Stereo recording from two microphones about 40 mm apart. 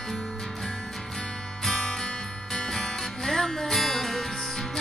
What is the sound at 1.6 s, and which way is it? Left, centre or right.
Music, centre.